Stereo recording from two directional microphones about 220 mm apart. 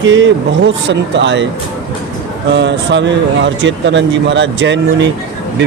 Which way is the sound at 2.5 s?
55° right (ahead or behind).